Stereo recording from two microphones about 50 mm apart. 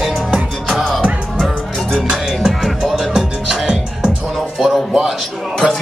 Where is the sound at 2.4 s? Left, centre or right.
Centre.